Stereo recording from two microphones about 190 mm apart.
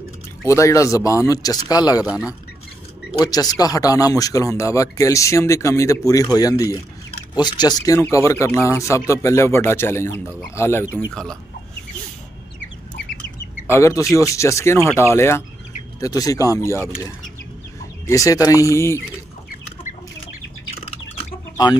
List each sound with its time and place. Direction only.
0.5 s speech: 15° left (ahead or behind)
2.0 s speech: 5° right (ahead or behind)
3.2 s speech: 20° left (ahead or behind)
13.7 s speech: 15° left (ahead or behind)
18.0 s speech: 15° left (ahead or behind)
19.5 s chicken: 45° left (ahead or behind)